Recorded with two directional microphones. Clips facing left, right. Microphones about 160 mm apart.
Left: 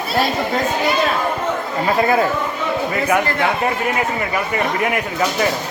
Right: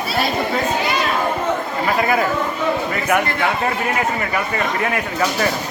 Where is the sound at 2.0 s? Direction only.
25° left (ahead or behind).